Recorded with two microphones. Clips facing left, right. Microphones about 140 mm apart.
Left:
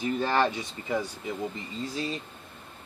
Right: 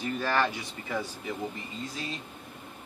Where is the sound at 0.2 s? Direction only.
25° left (ahead or behind).